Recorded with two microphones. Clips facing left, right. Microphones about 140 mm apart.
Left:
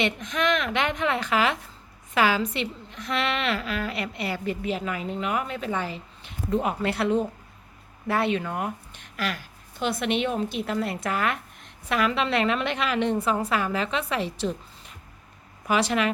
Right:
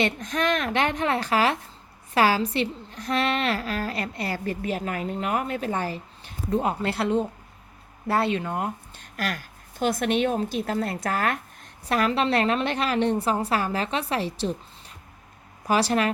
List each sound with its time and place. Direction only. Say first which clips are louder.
0.0 s a woman's voice: right 1 dB; 40° right (ahead or behind)
6.6 s speech: even; 30° right (ahead or behind)
9.1 s a woman's voice: even; 45° right (ahead or behind)
15.6 s a woman's voice: right 1 dB; 35° right (ahead or behind)